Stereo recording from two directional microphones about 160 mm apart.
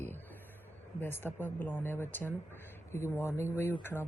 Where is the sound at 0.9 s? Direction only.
15° left (ahead or behind).